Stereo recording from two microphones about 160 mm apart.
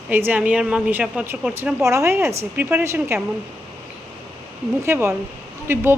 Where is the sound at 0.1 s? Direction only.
10° right (ahead or behind).